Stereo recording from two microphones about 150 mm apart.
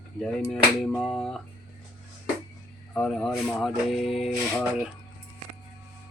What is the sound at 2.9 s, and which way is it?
Speech, 5° left (ahead or behind).